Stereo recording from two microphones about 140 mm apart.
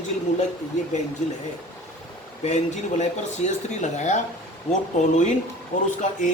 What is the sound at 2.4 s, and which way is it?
Speech, 55° left (ahead or behind).